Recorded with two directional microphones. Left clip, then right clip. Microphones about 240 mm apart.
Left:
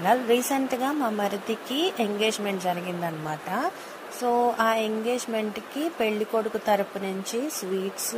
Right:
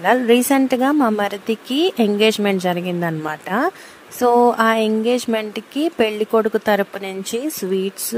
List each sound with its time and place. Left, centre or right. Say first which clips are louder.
0.0 s speech: right 7 dB; right